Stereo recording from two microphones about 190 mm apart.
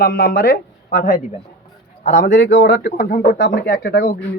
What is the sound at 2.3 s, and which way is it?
Speech, 70° left (ahead or behind).